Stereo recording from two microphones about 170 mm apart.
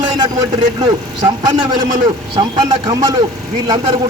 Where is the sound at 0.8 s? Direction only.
25° right (ahead or behind).